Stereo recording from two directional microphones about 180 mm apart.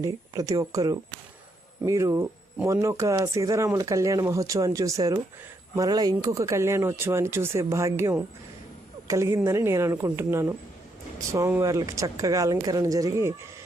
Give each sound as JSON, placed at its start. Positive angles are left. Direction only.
{"t": 0.0, "sound": "speech", "side_deg": -20}